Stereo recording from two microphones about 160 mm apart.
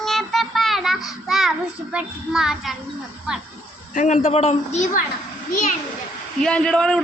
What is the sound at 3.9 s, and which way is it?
A woman's voice, 50° left (ahead or behind).